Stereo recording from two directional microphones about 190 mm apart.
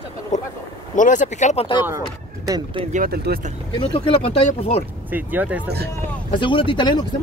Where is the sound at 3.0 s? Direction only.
55° right (ahead or behind).